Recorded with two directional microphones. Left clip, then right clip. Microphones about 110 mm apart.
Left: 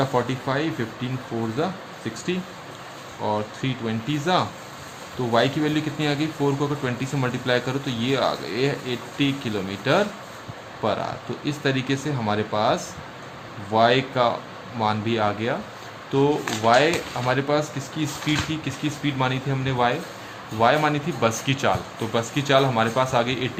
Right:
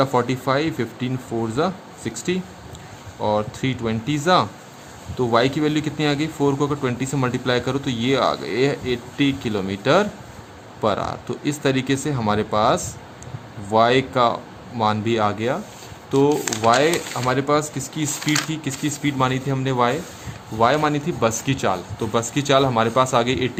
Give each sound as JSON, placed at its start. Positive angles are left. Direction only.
{"t": 0.0, "sound": "a man's voice", "side_deg": -60}